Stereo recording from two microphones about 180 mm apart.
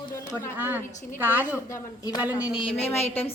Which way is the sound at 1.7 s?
20° left (ahead or behind).